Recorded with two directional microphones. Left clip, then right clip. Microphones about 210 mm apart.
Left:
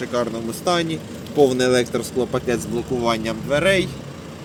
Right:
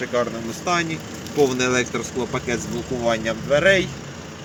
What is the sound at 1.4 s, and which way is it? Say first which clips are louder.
Speech: left 3 dB; 5° left (ahead or behind).